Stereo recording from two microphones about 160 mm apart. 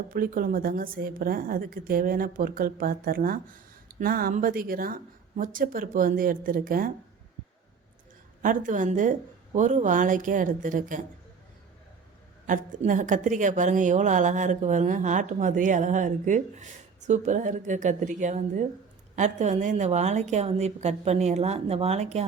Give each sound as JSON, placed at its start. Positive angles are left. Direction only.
{"t": 0.1, "sound": "a woman's voice", "side_deg": -60}
{"t": 8.4, "sound": "a woman's voice", "side_deg": -55}
{"t": 12.5, "sound": "a woman's voice", "side_deg": -55}